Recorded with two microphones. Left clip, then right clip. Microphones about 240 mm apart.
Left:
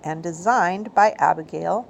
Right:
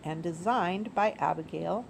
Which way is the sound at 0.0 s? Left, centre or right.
Centre.